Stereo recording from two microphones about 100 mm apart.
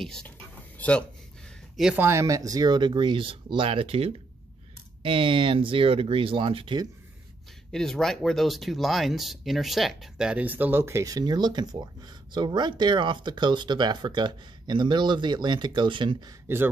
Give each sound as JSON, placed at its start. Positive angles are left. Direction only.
{"t": 0.0, "sound": "speech", "side_deg": 5}
{"t": 2.0, "sound": "speech", "side_deg": -30}
{"t": 5.0, "sound": "speech", "side_deg": -60}
{"t": 7.7, "sound": "speech", "side_deg": 5}
{"t": 11.1, "sound": "speech", "side_deg": -45}
{"t": 16.4, "sound": "speech", "side_deg": -20}